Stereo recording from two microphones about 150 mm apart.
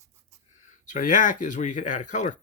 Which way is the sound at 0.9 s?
60° left (ahead or behind).